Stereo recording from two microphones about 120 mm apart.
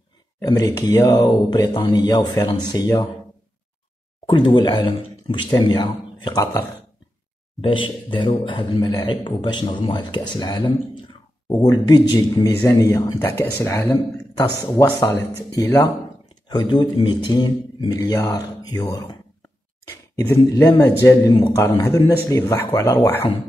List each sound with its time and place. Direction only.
0.4 s speech: 30° left (ahead or behind)
4.3 s speech: 40° left (ahead or behind)
7.6 s speech: 45° left (ahead or behind)
12.6 s speech: 20° left (ahead or behind)
16.9 s speech: 40° left (ahead or behind)
20.2 s speech: 25° left (ahead or behind)